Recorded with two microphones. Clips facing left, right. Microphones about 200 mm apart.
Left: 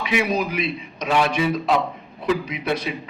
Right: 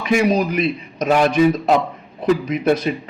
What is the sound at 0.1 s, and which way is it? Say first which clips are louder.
A man's voice: right 6 dB; 45° right (ahead or behind).